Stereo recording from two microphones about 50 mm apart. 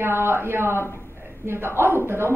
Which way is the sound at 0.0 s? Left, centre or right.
Right.